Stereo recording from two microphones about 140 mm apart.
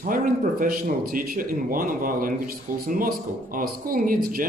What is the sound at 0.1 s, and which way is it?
Speech, 80° right.